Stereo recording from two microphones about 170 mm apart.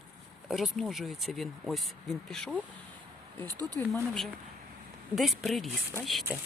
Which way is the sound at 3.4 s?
20° right (ahead or behind).